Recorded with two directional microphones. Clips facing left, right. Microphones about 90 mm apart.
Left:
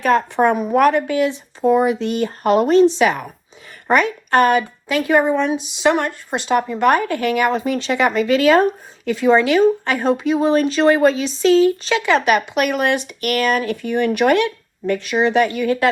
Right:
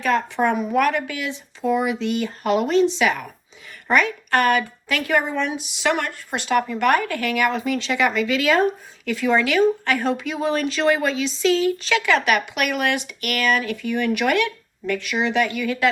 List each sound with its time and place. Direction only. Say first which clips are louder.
0.0 s speech: left 5 dB; 40° left (ahead or behind)
9.0 s speech: left 5 dB; 30° left (ahead or behind)